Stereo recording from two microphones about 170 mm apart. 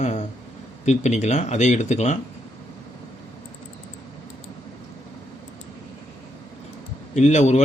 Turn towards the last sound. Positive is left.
turn(degrees=45)  # may be behind; listen again after turning